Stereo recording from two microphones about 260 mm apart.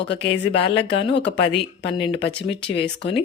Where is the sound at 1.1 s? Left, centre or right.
Left.